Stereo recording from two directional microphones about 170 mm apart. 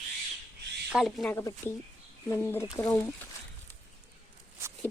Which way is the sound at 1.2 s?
15° left (ahead or behind).